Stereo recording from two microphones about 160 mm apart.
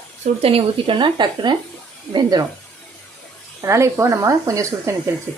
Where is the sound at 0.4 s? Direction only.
35° right (ahead or behind).